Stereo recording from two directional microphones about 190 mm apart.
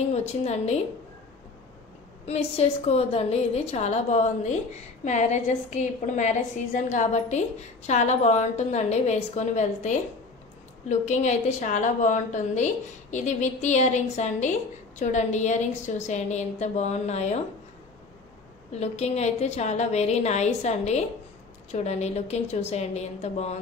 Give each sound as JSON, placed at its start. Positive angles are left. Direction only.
{"t": 0.1, "sound": "a woman's voice", "side_deg": 35}
{"t": 2.2, "sound": "a woman's voice", "side_deg": 35}
{"t": 18.7, "sound": "a woman's voice", "side_deg": 35}